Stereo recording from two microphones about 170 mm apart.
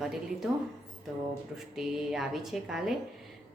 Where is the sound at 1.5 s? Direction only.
Centre (ahead or behind).